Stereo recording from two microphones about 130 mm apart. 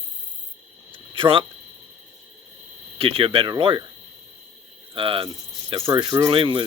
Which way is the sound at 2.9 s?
45° right (ahead or behind).